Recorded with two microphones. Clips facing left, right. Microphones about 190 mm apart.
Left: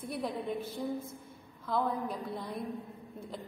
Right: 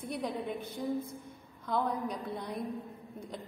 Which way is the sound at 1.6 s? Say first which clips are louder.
Even; centre (ahead or behind).